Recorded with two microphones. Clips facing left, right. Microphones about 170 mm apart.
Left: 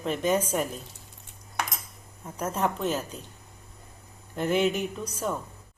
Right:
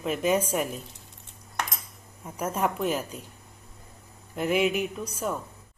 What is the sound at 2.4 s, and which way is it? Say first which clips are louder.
Speech: right 1 dB; 10° right (ahead or behind).